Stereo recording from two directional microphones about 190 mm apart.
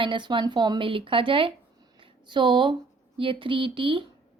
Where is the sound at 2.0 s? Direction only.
25° right (ahead or behind).